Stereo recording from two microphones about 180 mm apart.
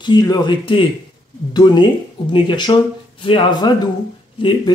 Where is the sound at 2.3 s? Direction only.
25° left (ahead or behind).